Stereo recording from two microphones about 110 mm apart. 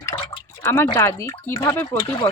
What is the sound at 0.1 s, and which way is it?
Speech, 20° left (ahead or behind).